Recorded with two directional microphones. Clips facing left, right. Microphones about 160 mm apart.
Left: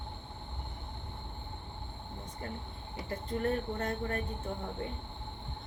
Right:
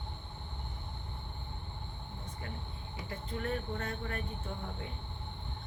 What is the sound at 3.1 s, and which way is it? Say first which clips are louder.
Speech: left 5 dB; 40° left (ahead or behind).